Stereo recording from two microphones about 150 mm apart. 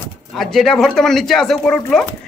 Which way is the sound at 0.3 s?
Centre (ahead or behind).